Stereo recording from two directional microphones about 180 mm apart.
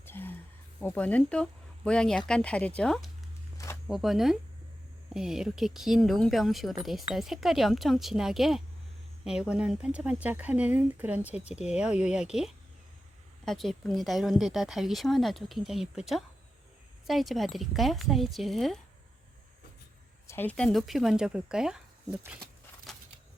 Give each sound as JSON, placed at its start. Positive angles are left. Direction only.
{"t": 0.0, "sound": "a sound", "side_deg": 10}
{"t": 0.8, "sound": "speech", "side_deg": 10}
{"t": 20.2, "sound": "speech", "side_deg": 10}